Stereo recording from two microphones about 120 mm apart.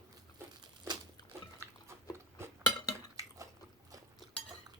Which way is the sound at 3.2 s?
30° right (ahead or behind).